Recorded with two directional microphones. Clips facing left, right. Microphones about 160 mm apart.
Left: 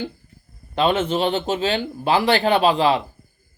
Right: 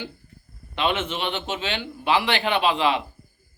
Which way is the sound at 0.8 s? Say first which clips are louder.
Left 6 dB; 40° left (ahead or behind).